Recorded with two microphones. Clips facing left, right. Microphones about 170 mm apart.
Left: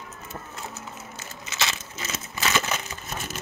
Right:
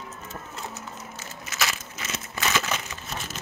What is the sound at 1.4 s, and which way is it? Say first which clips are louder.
Crushing: even; 25° left (ahead or behind).